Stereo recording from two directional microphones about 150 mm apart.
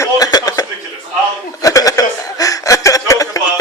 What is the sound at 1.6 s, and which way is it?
Chuckle, 20° left (ahead or behind).